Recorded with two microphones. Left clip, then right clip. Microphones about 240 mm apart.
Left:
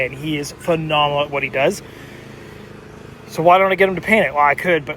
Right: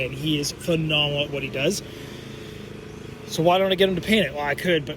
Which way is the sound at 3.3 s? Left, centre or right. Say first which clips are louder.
Left 7 dB; centre.